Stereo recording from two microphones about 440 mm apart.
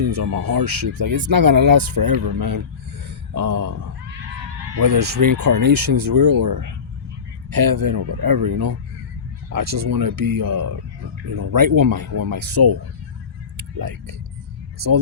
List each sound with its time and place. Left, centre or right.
0.0 s speech: right
4.8 s speech: right